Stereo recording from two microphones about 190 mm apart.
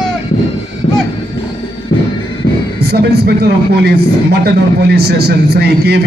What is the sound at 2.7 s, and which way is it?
Speech, 60° right (ahead or behind).